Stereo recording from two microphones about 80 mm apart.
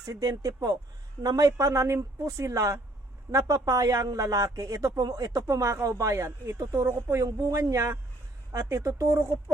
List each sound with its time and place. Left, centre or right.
0.0 s speech: right
7.3 s speech: right